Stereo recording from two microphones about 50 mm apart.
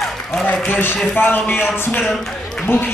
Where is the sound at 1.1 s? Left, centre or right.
Left.